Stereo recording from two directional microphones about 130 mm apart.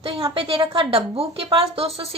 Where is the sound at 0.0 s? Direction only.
45° right (ahead or behind).